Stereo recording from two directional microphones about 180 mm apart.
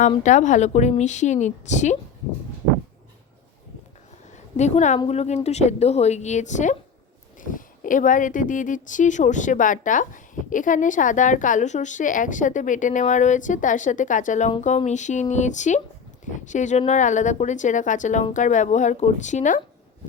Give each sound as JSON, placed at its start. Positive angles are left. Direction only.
{"t": 0.0, "sound": "a woman's voice", "side_deg": 40}
{"t": 4.5, "sound": "a woman's voice", "side_deg": 40}